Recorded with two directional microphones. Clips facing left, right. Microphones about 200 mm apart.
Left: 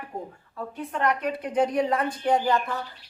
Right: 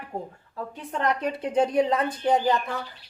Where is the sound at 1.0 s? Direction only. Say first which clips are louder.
Even; 30° right (ahead or behind).